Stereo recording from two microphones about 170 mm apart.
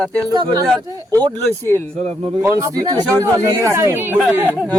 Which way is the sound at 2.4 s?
20° right (ahead or behind).